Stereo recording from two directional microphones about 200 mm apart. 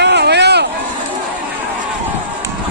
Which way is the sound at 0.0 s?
55° right (ahead or behind).